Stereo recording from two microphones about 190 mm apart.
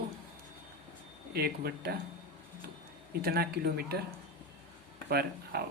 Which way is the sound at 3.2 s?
55° right (ahead or behind).